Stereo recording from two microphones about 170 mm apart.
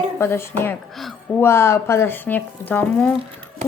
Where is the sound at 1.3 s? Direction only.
15° left (ahead or behind).